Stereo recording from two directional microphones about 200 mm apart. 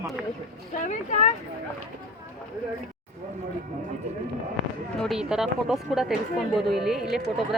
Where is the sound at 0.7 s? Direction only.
40° left (ahead or behind).